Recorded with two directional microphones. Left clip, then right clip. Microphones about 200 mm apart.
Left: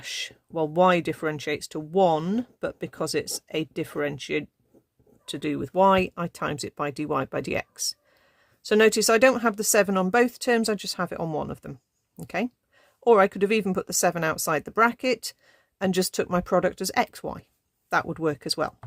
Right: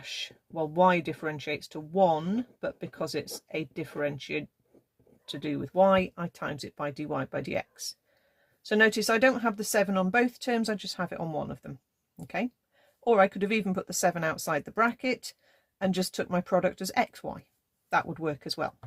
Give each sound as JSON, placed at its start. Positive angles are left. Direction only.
{"t": 0.0, "sound": "speech", "side_deg": 45}